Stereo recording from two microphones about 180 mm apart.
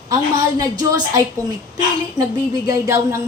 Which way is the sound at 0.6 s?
20° right (ahead or behind).